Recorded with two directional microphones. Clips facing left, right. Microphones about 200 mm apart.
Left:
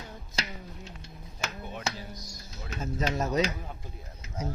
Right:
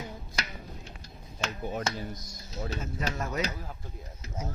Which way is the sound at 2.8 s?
20° left (ahead or behind).